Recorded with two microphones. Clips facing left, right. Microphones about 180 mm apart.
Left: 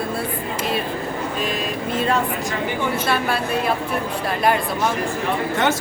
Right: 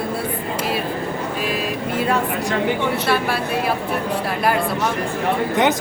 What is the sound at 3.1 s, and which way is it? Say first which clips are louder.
Speech: right 1 dB; 5° right (ahead or behind).